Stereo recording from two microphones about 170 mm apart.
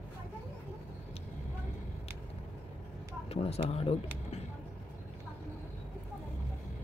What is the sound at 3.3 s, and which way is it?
Speech, 35° left (ahead or behind).